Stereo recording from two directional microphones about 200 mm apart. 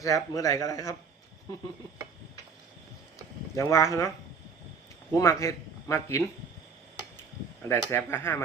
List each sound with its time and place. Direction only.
0.0 s a man's voice: 15° left (ahead or behind)
3.5 s a man's voice: 15° left (ahead or behind)
5.1 s a man's voice: 15° left (ahead or behind)
7.6 s a man's voice: 10° left (ahead or behind)